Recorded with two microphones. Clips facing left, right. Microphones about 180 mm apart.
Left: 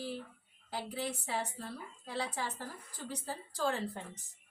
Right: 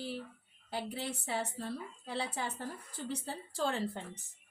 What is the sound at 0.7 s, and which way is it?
Speech, 25° right (ahead or behind).